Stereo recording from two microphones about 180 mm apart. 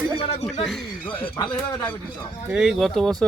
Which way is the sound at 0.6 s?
Centre (ahead or behind).